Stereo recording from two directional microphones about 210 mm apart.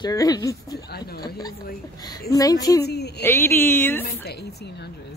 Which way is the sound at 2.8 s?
50° left (ahead or behind).